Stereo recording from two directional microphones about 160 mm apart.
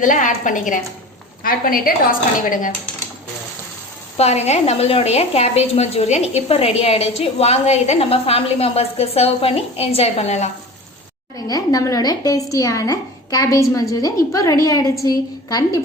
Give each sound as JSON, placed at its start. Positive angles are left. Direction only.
{"t": 0.0, "sound": "a woman's voice", "side_deg": 55}
{"t": 4.2, "sound": "a woman's voice", "side_deg": 45}
{"t": 11.3, "sound": "a woman's voice", "side_deg": 25}